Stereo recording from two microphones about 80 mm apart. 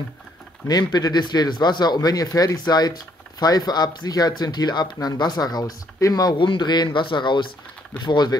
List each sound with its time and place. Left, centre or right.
0.7 s speech: left
6.3 s speech: left
8.0 s speech: left